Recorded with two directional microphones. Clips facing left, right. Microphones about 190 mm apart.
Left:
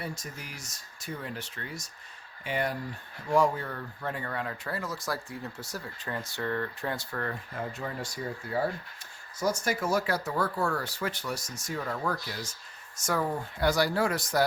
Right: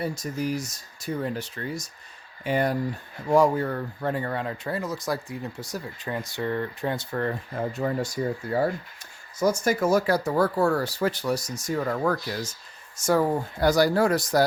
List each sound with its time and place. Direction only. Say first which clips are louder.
0.0 s speech: right 11 dB; 40° right (ahead or behind)
9.4 s speech: right 7 dB; 45° right (ahead or behind)
13.0 s speech: right 8 dB; 30° right (ahead or behind)